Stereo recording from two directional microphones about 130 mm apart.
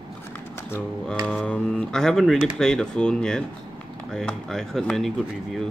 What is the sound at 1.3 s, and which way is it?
Speech, 5° left (ahead or behind).